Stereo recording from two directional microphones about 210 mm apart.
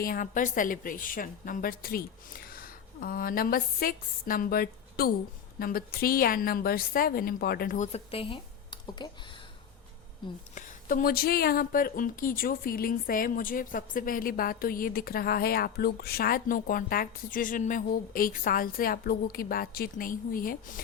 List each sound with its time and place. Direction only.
0.0 s speech: 40° left (ahead or behind); by 9.0 s 20° left (ahead or behind)
10.5 s speech: 40° left (ahead or behind)